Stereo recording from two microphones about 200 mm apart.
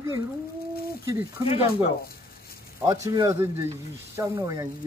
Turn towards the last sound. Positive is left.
turn(degrees=-15)  # may be behind; listen again after turning